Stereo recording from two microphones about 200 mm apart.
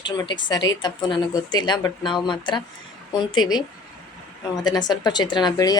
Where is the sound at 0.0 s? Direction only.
20° left (ahead or behind).